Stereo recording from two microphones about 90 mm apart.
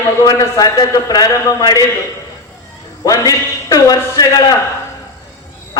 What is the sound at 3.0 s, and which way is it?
A man's voice, 40° left (ahead or behind).